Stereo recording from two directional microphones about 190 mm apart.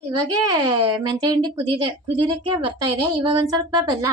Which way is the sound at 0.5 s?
20° right (ahead or behind).